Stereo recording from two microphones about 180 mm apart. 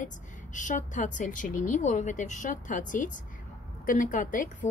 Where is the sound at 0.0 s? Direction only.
45° left (ahead or behind).